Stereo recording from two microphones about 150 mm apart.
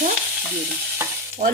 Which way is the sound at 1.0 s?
20° right (ahead or behind).